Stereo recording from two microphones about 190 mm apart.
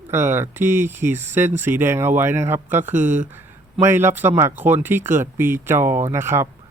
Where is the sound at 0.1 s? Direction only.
10° right (ahead or behind).